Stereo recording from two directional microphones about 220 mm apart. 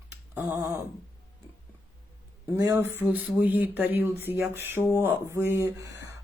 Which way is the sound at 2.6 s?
15° right (ahead or behind).